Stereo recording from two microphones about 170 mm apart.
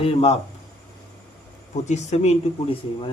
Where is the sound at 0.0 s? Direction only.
35° left (ahead or behind).